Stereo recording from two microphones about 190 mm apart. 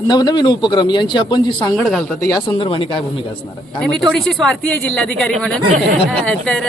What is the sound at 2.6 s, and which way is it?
Speech, 25° left (ahead or behind).